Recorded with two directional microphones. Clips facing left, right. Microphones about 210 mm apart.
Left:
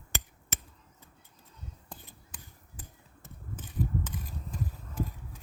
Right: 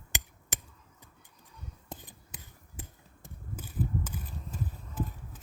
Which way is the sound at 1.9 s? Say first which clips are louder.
Right 3 dB; 20° right (ahead or behind).